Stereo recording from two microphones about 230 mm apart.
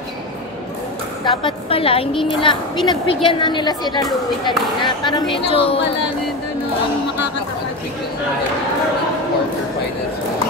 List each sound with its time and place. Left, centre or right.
1.2 s a woman's voice: left